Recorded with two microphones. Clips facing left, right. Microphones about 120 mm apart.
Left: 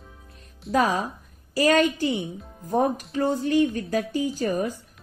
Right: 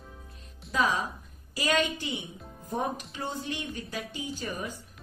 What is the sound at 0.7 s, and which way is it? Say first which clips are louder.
A woman's voice: left 6 dB; 40° left (ahead or behind).